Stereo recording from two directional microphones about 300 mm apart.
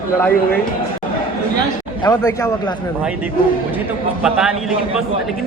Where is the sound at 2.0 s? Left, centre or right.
Centre.